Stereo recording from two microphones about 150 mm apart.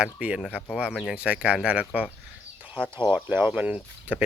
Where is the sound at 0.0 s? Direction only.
5° right (ahead or behind).